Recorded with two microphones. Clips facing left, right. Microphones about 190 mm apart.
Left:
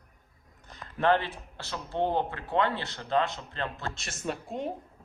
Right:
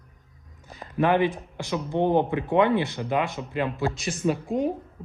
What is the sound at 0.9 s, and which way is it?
Speech, 15° right (ahead or behind).